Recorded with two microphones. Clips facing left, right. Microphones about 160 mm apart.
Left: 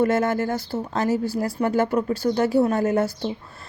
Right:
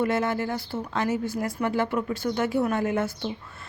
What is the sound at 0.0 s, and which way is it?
A woman's voice, 45° left (ahead or behind).